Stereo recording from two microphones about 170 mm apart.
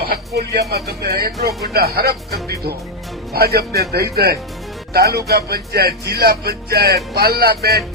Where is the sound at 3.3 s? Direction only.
70° right (ahead or behind).